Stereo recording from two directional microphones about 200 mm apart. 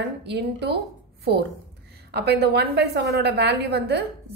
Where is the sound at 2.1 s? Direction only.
55° right (ahead or behind).